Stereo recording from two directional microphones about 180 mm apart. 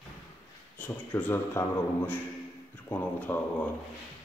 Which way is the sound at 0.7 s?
10° left (ahead or behind).